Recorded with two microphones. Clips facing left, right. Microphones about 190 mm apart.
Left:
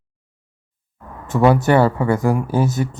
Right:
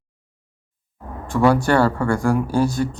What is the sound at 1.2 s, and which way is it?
Speech, 20° left (ahead or behind).